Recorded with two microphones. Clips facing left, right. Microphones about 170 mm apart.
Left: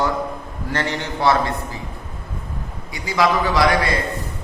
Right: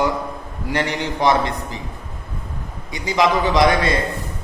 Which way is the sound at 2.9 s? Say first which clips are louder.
Right 1 dB; 20° right (ahead or behind).